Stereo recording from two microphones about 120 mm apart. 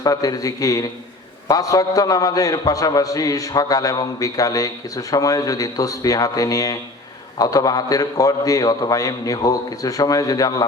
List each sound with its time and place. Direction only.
0.0 s a man's voice: 30° left (ahead or behind)